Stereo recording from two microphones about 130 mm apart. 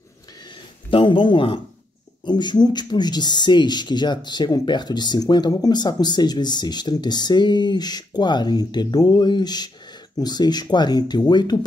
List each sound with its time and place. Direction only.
0.8 s a man's voice: 40° left (ahead or behind)